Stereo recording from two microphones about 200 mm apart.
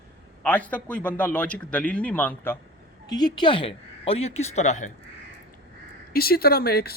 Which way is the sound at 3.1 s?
20° left (ahead or behind).